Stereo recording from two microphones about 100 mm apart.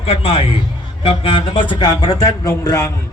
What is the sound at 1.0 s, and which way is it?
A man's voice, 60° left (ahead or behind).